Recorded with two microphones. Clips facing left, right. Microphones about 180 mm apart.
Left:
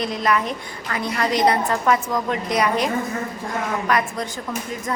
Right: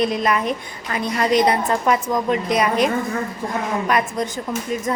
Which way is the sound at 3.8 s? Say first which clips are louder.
Right 2 dB; 20° right (ahead or behind).